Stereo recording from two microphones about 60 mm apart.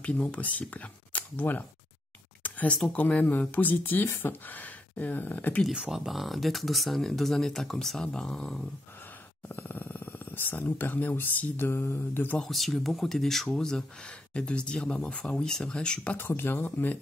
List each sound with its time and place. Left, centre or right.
0.0 s speech: centre
2.4 s a sound: left
2.9 s speech: left
5.7 s speech: centre
9.5 s speech: left
12.4 s speech: centre
16.2 s speech: left